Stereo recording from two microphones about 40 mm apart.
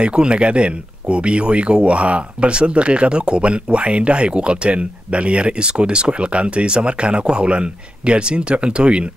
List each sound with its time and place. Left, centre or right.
0.0 s speech: right